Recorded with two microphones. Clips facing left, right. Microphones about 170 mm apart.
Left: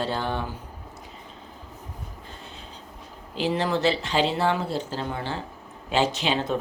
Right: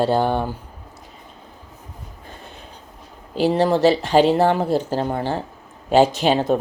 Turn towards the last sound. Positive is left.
turn(degrees=-45)  # may be behind; listen again after turning